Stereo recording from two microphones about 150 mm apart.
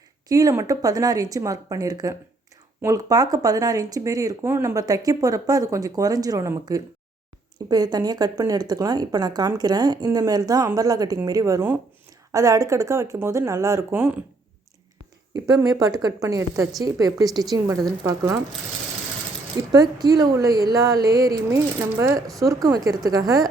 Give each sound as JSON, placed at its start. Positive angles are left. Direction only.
{"t": 0.3, "sound": "speech", "side_deg": -25}
{"t": 15.3, "sound": "speech", "side_deg": -25}
{"t": 19.7, "sound": "speech", "side_deg": -25}